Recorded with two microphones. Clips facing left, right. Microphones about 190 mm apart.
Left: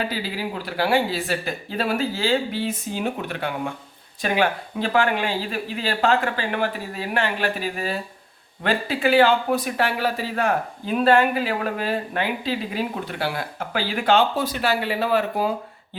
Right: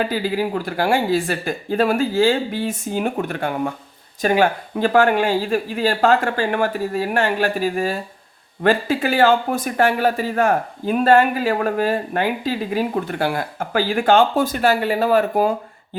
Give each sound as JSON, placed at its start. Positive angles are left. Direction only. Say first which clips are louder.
{"t": 0.0, "sound": "speech", "louder": "right 6 dB", "side_deg": -50}